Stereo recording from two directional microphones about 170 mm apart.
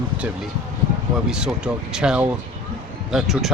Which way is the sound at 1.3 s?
5° right (ahead or behind).